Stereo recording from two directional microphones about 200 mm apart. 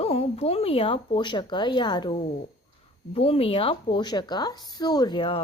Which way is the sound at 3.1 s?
30° left (ahead or behind).